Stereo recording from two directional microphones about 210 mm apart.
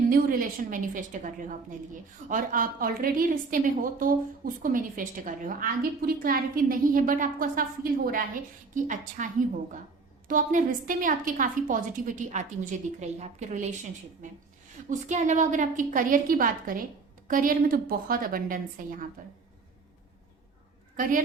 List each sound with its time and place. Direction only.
0.1 s a woman's voice: 40° right (ahead or behind)
8.7 s a woman's voice: 40° right (ahead or behind)
14.8 s a woman's voice: 35° right (ahead or behind)
20.9 s a woman's voice: 40° right (ahead or behind)